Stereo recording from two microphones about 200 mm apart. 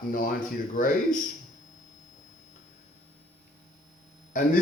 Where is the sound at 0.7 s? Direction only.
40° left (ahead or behind).